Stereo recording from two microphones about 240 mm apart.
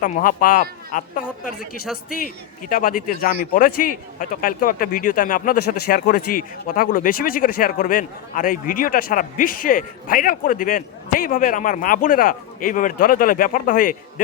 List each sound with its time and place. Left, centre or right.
0.0 s a man's voice: left